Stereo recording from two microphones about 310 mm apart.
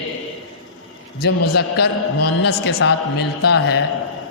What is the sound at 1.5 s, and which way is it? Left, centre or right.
A man's voice, left.